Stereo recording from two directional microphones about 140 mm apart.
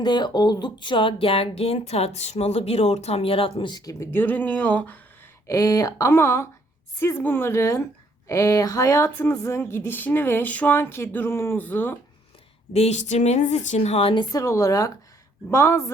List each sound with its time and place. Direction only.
0.0 s speech: 30° left (ahead or behind); by 4.9 s 10° left (ahead or behind)
5.5 s speech: 25° left (ahead or behind)
12.7 s a woman's voice: 50° left (ahead or behind)
14.3 s speech: 20° left (ahead or behind)